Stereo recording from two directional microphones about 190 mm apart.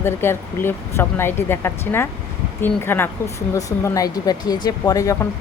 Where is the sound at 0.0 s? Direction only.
10° left (ahead or behind).